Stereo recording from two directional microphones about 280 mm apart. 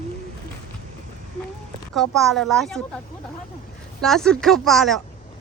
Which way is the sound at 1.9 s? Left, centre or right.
Centre.